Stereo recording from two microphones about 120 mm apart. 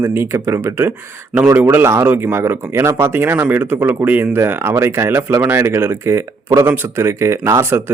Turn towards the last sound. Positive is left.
turn(degrees=-20)  # may be behind; listen again after turning